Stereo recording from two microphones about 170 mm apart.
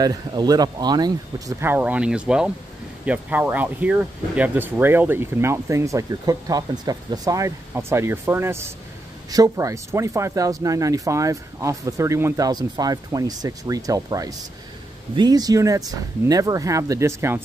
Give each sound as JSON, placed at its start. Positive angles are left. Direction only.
{"t": 0.0, "sound": "speech", "side_deg": -20}
{"t": 1.6, "sound": "speech", "side_deg": -10}